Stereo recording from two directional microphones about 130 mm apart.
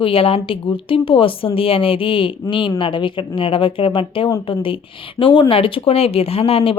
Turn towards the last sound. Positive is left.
turn(degrees=50)  # may be behind; listen again after turning